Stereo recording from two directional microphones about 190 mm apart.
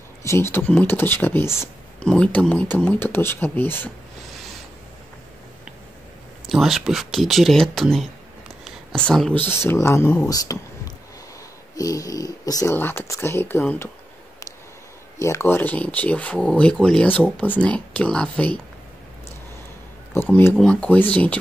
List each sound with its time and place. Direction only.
0.2 s speech: 15° left (ahead or behind)
6.4 s speech: centre (ahead or behind); by 10.6 s 15° left (ahead or behind)
11.7 s speech: 20° left (ahead or behind)
15.1 s speech: 15° left (ahead or behind)
20.2 s speech: 10° left (ahead or behind)